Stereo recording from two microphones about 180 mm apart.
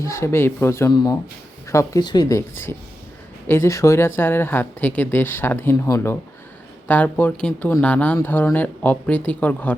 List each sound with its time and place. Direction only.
0.0 s speech: 15° left (ahead or behind)